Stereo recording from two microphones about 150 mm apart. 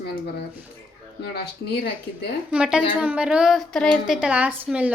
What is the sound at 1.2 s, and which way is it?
Speech, 90° left.